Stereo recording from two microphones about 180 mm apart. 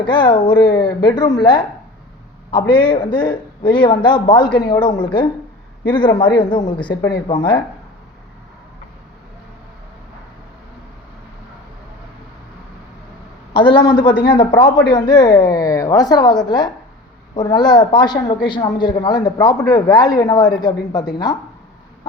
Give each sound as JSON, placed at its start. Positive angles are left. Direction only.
{"t": 0.0, "sound": "a man's voice", "side_deg": 25}
{"t": 6.7, "sound": "speech", "side_deg": 5}
{"t": 7.3, "sound": "a man's voice", "side_deg": 25}
{"t": 13.5, "sound": "a man's voice", "side_deg": 30}